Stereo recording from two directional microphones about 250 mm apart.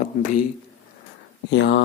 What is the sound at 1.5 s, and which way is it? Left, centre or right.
Speech, left.